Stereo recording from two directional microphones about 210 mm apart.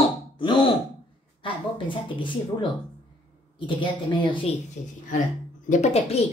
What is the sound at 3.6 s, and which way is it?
Speech, 25° left (ahead or behind).